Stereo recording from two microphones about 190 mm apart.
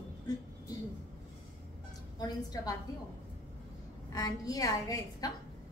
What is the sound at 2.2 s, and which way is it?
Speech, 20° left (ahead or behind).